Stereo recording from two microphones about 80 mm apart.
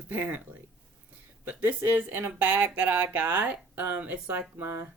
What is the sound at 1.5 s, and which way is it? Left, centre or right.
Speech, right.